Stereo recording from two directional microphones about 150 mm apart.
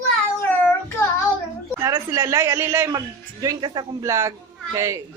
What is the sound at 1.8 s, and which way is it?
A man's voice, 20° right (ahead or behind).